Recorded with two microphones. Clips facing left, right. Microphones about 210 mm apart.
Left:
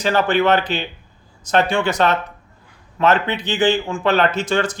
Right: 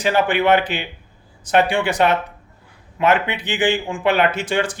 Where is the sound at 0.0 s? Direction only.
15° right (ahead or behind).